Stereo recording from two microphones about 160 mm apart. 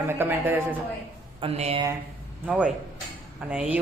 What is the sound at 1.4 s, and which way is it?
Speech, 40° right (ahead or behind).